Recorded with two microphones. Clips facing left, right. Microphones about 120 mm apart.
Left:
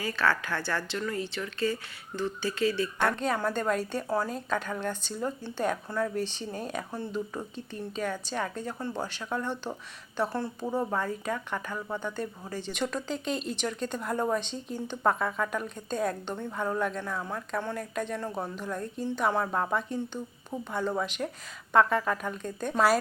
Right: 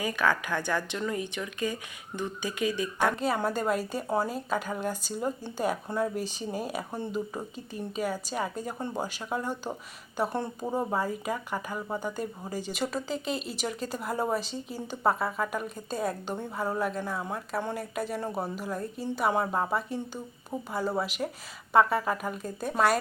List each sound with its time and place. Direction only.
0.0 s speech: 15° right (ahead or behind)